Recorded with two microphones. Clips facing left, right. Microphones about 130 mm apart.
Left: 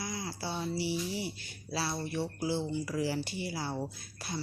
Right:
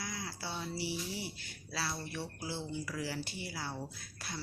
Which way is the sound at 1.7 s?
20° left (ahead or behind).